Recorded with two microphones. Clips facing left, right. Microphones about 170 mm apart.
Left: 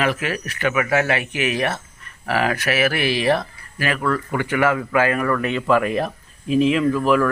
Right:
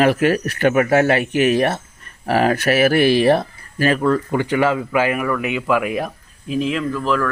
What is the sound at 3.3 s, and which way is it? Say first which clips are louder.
Speech: right 4 dB; 35° right (ahead or behind).